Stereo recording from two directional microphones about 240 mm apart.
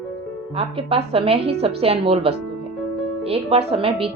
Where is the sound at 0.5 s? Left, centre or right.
Right.